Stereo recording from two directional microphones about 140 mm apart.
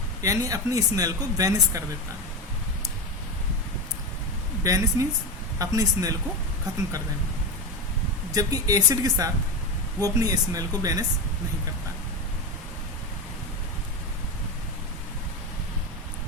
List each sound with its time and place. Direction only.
0.2 s speech: 25° right (ahead or behind)
4.6 s speech: 25° right (ahead or behind)
8.3 s speech: 25° right (ahead or behind)